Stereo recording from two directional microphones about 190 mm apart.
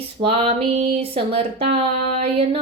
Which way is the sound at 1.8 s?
30° right (ahead or behind).